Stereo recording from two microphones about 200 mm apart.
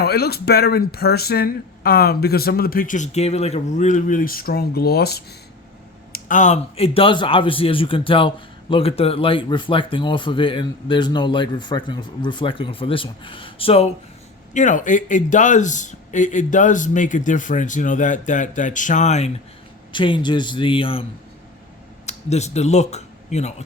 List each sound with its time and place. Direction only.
0.0 s speech: 50° left (ahead or behind)
6.1 s speech: 40° left (ahead or behind)
19.9 s speech: 25° left (ahead or behind)